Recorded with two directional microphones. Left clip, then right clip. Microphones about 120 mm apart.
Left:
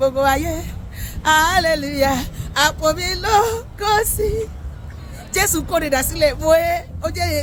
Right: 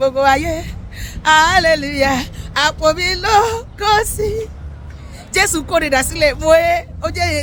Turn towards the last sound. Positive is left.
turn(degrees=-30)  # may be behind; listen again after turning